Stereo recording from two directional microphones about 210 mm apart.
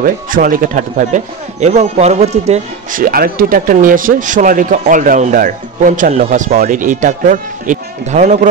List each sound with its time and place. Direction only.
0.0 s speech: 40° right (ahead or behind)